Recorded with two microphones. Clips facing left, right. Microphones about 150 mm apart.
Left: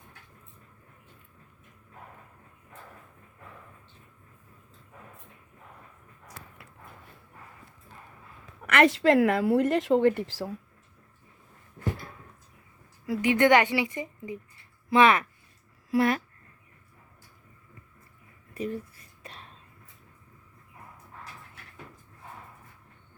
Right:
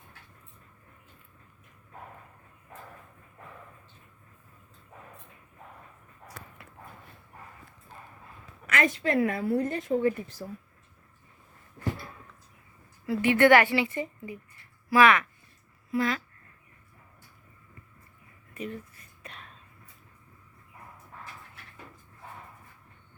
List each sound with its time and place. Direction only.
8.6 s a woman's voice: 70° left (ahead or behind); by 10.5 s 90° left
13.1 s a woman's voice: 15° left (ahead or behind)
14.8 s speech: 25° left (ahead or behind)
15.9 s speech: 60° left (ahead or behind)
18.5 s speech: 35° left (ahead or behind)
19.2 s whispering: 30° left (ahead or behind)